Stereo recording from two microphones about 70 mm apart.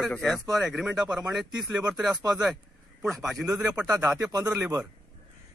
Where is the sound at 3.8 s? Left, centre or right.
Centre.